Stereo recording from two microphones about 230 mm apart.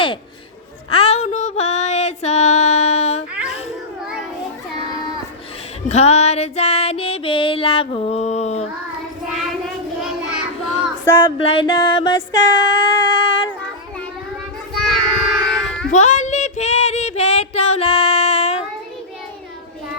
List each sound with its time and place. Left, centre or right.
0.9 s a sound: left
5.9 s female singing: left
9.3 s child singing: centre
11.3 s a sound: left
14.8 s child singing: centre
15.9 s child singing: left